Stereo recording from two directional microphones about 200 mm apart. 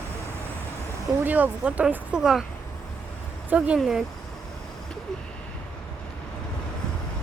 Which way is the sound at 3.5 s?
5° right (ahead or behind).